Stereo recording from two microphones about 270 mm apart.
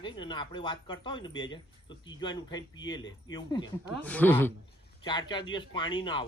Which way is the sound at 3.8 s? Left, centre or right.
Centre.